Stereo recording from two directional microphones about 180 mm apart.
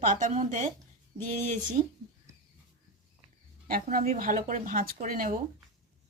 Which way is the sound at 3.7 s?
50° right (ahead or behind).